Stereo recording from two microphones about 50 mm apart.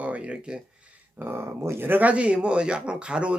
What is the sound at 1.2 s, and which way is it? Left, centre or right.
Speech, right.